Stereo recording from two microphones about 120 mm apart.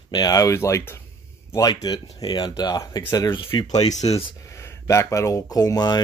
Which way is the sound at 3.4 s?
45° left (ahead or behind).